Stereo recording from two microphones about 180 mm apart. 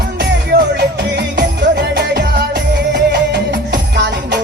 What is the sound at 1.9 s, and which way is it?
Music, 60° right (ahead or behind).